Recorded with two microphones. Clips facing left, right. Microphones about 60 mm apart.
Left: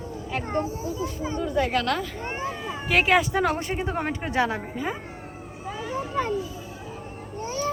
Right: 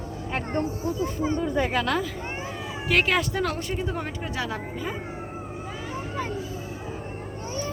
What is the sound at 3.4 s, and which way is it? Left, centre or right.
A woman's voice, left.